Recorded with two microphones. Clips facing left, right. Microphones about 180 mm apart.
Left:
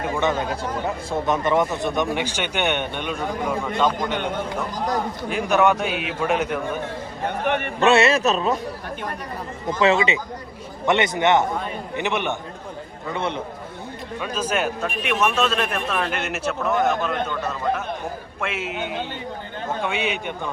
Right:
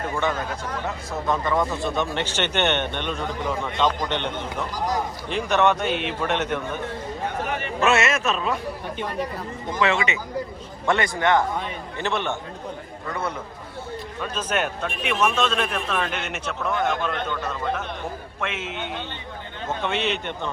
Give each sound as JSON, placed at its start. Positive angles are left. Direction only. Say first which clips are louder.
{"t": 0.2, "sound": "a man's voice", "louder": "left 4 dB", "side_deg": 20}
{"t": 5.5, "sound": "speech", "louder": "left 1 dB", "side_deg": 10}
{"t": 7.3, "sound": "a sound", "louder": "left 6 dB", "side_deg": 65}
{"t": 7.8, "sound": "speech", "louder": "left 4 dB", "side_deg": 30}
{"t": 10.8, "sound": "a man's voice", "louder": "left 3 dB", "side_deg": 20}
{"t": 14.2, "sound": "speech", "louder": "left 2 dB", "side_deg": 10}